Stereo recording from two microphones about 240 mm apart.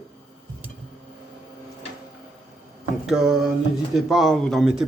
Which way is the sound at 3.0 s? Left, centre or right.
Centre.